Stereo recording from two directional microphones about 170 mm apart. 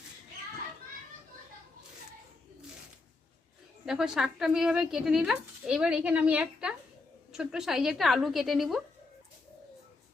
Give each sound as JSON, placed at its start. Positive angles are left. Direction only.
{"t": 3.8, "sound": "speech", "side_deg": 0}